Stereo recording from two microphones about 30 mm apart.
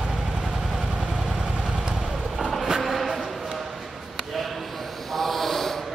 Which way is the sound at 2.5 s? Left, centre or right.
Centre.